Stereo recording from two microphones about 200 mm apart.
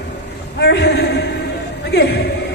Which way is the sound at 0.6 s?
55° left (ahead or behind).